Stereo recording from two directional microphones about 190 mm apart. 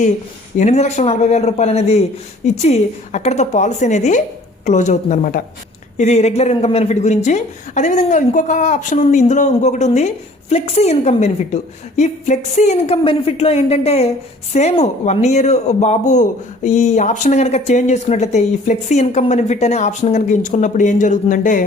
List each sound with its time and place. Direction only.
0.5 s speech: 35° left (ahead or behind)